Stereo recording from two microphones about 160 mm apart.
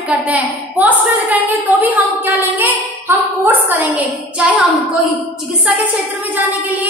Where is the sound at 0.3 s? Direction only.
10° right (ahead or behind).